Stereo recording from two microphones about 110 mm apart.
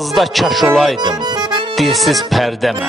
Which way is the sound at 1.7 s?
Centre (ahead or behind).